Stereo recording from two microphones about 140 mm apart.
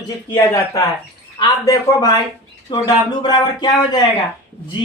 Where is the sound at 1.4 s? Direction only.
25° left (ahead or behind).